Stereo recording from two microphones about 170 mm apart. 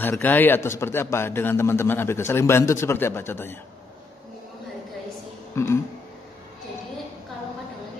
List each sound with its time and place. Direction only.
0.0 s a man's voice: 10° left (ahead or behind)
5.5 s a man's voice: 15° left (ahead or behind)